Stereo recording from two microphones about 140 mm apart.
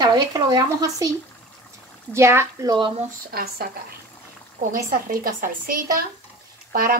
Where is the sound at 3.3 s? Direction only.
90° right.